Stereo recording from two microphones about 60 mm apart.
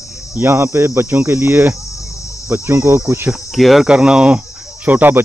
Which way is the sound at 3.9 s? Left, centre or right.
Centre.